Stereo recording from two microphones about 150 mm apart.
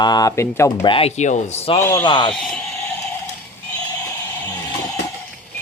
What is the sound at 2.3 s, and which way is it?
Speech, 5° left (ahead or behind).